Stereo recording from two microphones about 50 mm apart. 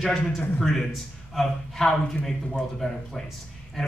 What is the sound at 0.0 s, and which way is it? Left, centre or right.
A man's voice, centre.